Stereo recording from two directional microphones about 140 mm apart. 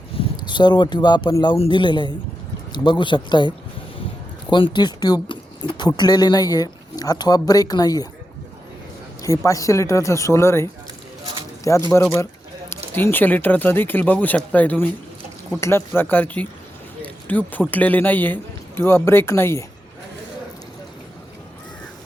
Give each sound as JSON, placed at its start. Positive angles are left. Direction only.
{"t": 0.2, "sound": "a man's voice", "side_deg": 35}
{"t": 4.5, "sound": "speech", "side_deg": 35}
{"t": 9.2, "sound": "speech", "side_deg": 25}
{"t": 12.9, "sound": "speech", "side_deg": 15}
{"t": 15.9, "sound": "speech", "side_deg": 15}
{"t": 17.0, "sound": "a sound", "side_deg": 10}
{"t": 17.7, "sound": "speech", "side_deg": 10}